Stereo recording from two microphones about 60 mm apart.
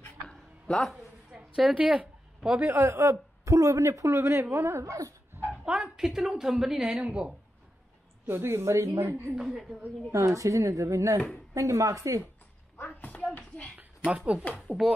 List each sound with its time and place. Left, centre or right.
0.3 s a sound: centre
1.6 s speech: centre
2.6 s a man's voice: right
5.7 s a woman's voice: centre
7.0 s speech: right
8.3 s a woman's voice: right
8.8 s a man's voice: right
9.3 s a woman's voice: centre
10.1 s a man's voice: right
12.8 s a sound: left
13.7 s a sound: right
14.8 s a woman's voice: centre